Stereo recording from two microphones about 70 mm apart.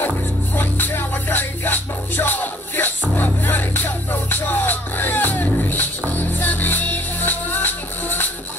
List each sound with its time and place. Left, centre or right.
0.6 s music: left